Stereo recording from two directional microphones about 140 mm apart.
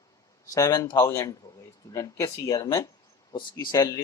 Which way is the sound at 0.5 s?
25° left (ahead or behind).